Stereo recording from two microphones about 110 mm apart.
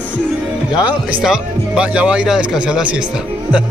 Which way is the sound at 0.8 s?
10° right (ahead or behind).